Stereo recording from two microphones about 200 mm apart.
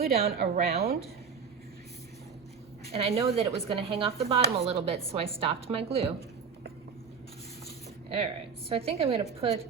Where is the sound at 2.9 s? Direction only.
30° right (ahead or behind).